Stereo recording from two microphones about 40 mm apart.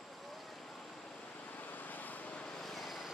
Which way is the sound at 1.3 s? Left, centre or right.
Left.